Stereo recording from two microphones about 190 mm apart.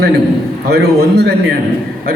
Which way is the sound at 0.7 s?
55° right (ahead or behind).